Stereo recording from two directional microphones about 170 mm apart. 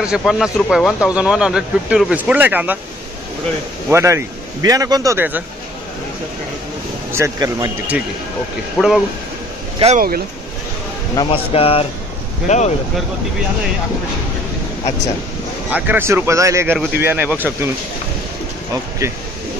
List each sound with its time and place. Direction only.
0.0 s speech: centre (ahead or behind)
3.9 s speech: 15° right (ahead or behind)
7.1 s speech: 15° right (ahead or behind)
8.7 s speech: 5° right (ahead or behind)
9.9 s speech: 60° right (ahead or behind)
11.1 s speech: 35° left (ahead or behind)
15.7 s speech: 10° right (ahead or behind)